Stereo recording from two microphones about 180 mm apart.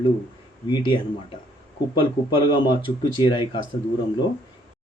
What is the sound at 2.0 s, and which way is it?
Speech, 25° left (ahead or behind).